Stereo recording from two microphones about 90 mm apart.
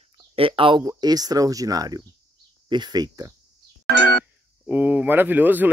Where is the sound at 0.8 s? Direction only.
45° right (ahead or behind).